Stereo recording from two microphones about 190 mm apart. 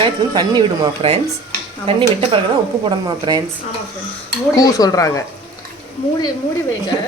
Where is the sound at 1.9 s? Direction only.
25° right (ahead or behind).